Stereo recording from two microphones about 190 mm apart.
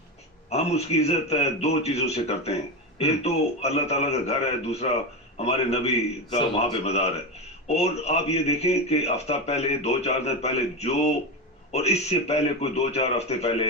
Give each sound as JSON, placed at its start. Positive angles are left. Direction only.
{"t": 0.5, "sound": "a man's voice", "side_deg": 35}